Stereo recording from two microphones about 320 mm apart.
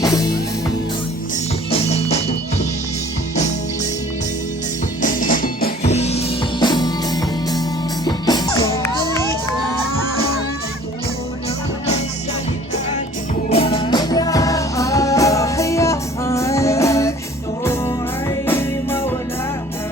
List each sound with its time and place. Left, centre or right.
0.0 s music: centre
1.7 s music: centre
5.0 s music: left; by 8.9 s centre
13.5 s music: centre